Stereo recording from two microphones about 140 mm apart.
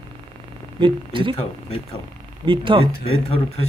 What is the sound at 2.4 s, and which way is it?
Speech, 35° right (ahead or behind).